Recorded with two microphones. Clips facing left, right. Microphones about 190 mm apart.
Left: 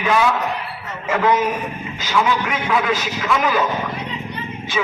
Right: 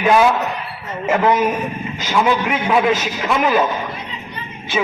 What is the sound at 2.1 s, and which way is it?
A man's voice, 25° right (ahead or behind).